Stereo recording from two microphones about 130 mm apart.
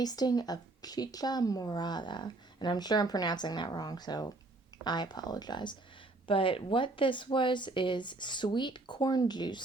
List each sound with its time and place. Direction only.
0.0 s speech: 30° left (ahead or behind)